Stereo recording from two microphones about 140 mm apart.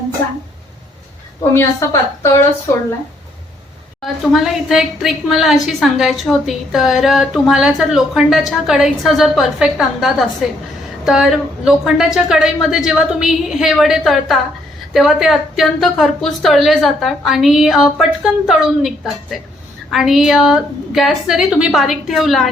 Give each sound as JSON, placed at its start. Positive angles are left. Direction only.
{"t": 1.5, "sound": "a woman's voice", "side_deg": 20}
{"t": 4.0, "sound": "a woman's voice", "side_deg": 0}